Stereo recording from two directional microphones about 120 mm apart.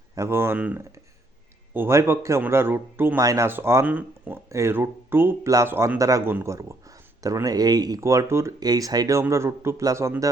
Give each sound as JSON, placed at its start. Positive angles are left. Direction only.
{"t": 0.2, "sound": "speech", "side_deg": -20}